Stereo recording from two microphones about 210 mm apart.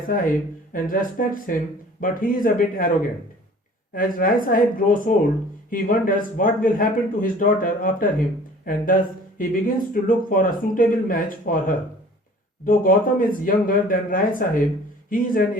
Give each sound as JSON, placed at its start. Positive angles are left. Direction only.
{"t": 0.1, "sound": "speech", "side_deg": 40}
{"t": 3.9, "sound": "speech", "side_deg": 40}